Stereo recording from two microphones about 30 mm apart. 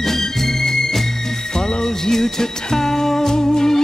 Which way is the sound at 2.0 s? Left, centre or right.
Centre.